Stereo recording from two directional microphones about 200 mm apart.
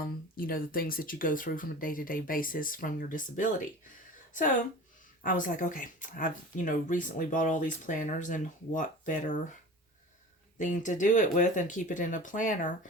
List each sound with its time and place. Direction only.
0.3 s speech: 45° left (ahead or behind)
5.2 s speech: 40° left (ahead or behind)
10.6 s speech: 40° left (ahead or behind)